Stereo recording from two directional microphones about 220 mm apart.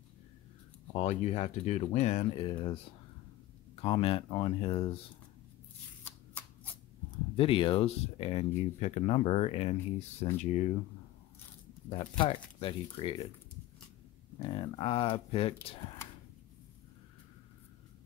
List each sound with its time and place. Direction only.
0.9 s speech: 30° left (ahead or behind)
6.0 s shuffling cards: 10° left (ahead or behind)
7.3 s speech: 25° left (ahead or behind)
11.9 s speech: 25° left (ahead or behind)
14.5 s speech: 25° left (ahead or behind)